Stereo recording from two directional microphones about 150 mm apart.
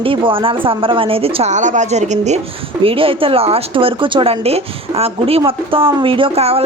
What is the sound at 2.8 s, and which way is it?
A woman's voice, 35° right (ahead or behind).